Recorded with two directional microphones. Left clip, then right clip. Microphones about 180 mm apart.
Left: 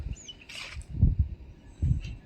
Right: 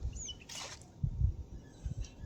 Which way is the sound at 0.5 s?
25° right (ahead or behind).